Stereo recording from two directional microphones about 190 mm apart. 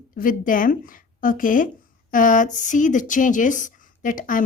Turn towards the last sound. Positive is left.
turn(degrees=45)  # may be behind; listen again after turning